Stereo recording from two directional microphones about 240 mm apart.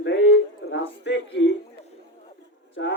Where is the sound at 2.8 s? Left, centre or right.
Left.